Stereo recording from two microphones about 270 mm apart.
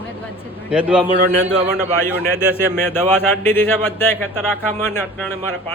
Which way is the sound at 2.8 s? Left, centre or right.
Centre.